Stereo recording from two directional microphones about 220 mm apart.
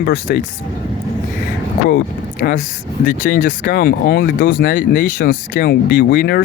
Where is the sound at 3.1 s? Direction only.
35° left (ahead or behind).